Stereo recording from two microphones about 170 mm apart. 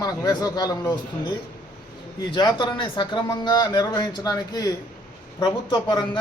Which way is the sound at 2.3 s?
25° left (ahead or behind).